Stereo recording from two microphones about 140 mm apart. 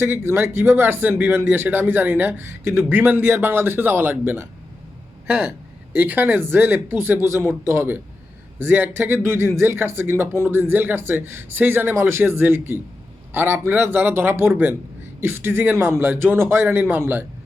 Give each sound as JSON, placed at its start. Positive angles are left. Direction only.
{"t": 0.0, "sound": "speech", "side_deg": -15}